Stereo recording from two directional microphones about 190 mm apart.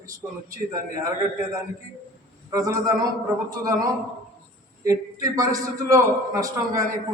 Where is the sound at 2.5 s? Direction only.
20° right (ahead or behind).